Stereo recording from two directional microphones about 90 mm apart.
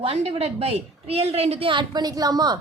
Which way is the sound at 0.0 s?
90° right.